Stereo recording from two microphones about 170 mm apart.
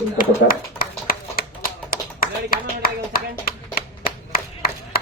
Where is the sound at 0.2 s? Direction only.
55° left (ahead or behind).